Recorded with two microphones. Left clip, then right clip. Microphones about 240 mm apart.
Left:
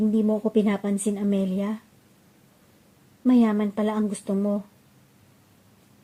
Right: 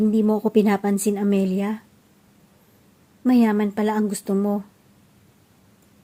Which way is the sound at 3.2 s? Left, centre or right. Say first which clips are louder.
Right 2 dB; right.